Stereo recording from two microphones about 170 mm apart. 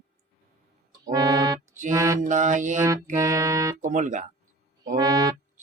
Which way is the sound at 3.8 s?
45° right (ahead or behind).